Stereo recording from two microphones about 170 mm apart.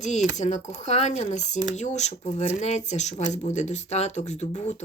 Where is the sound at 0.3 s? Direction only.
40° left (ahead or behind).